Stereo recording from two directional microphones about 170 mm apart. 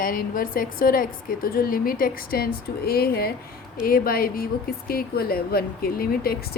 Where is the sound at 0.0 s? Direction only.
55° left (ahead or behind).